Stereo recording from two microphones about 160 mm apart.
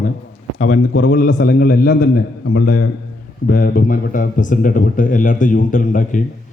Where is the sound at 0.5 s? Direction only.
50° left (ahead or behind).